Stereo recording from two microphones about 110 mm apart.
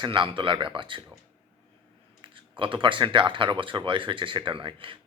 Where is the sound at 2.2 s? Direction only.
50° right (ahead or behind).